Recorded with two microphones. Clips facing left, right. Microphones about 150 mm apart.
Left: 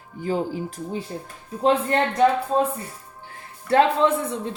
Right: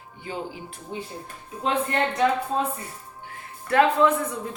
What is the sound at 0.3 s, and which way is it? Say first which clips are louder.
Speech: left 8 dB; 40° left (ahead or behind).